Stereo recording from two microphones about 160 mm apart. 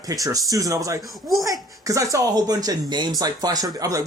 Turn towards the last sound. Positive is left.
turn(degrees=-20)  # may be behind; listen again after turning